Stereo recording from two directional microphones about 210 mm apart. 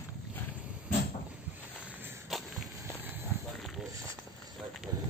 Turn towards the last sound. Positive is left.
turn(degrees=-5)  # may be behind; listen again after turning